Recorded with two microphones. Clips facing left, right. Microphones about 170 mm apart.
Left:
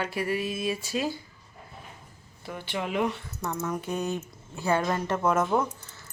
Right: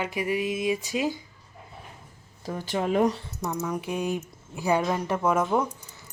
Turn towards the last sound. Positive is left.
turn(degrees=-10)  # may be behind; listen again after turning